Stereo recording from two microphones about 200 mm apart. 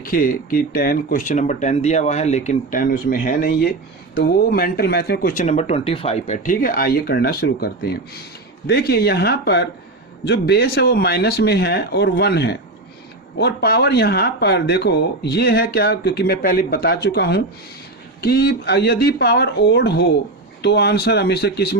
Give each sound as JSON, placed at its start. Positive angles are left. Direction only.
{"t": 0.0, "sound": "speech", "side_deg": 45}
{"t": 5.3, "sound": "speech", "side_deg": 35}